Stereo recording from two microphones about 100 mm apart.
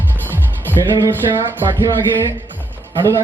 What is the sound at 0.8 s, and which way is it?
Music, 35° right (ahead or behind).